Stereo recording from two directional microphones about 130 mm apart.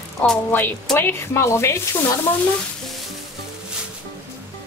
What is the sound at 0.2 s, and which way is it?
Speech, 10° left (ahead or behind).